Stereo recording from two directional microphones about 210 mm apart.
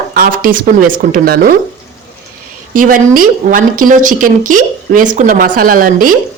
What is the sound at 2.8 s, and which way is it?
A woman's voice, 40° right (ahead or behind).